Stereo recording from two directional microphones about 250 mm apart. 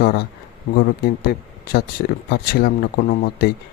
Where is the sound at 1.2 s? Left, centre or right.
Left.